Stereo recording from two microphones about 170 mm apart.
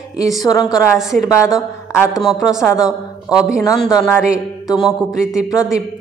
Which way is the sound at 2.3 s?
5° right (ahead or behind).